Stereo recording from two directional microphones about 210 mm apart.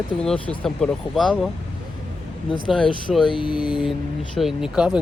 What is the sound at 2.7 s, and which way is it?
Speech, centre (ahead or behind).